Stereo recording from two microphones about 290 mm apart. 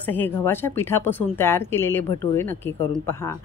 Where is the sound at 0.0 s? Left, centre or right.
Centre.